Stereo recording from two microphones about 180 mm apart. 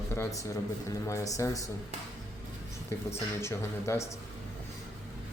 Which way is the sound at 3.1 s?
15° left (ahead or behind).